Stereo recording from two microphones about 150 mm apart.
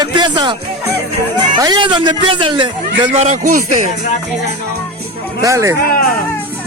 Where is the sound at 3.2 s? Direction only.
60° right (ahead or behind).